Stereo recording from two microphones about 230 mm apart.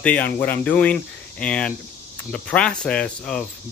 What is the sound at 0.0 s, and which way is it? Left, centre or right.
Speech, centre.